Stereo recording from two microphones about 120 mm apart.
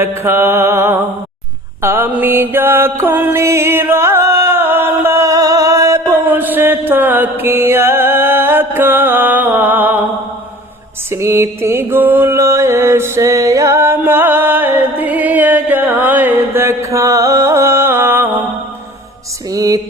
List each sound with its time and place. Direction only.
0.0 s mantra: 20° right (ahead or behind)
11.1 s mantra: 20° right (ahead or behind)
19.5 s music: 30° right (ahead or behind)